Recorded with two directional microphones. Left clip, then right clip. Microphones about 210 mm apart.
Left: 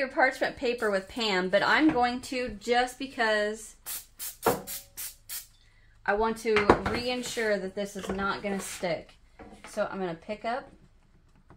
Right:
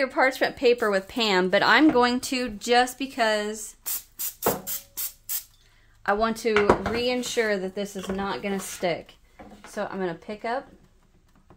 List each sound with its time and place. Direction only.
0.0 s speech: 55° right (ahead or behind)
6.0 s speech: 55° right (ahead or behind)
9.8 s speech: 35° right (ahead or behind)